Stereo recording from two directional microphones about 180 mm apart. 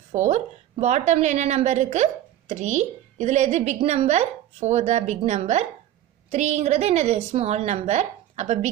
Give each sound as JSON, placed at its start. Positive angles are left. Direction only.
{"t": 0.1, "sound": "a woman's voice", "side_deg": -40}